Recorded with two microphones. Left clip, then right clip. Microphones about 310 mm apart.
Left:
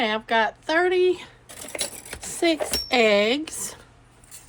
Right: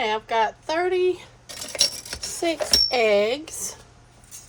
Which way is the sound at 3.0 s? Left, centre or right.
Left.